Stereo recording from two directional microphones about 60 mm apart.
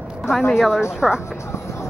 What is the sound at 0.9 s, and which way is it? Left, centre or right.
Speech, centre.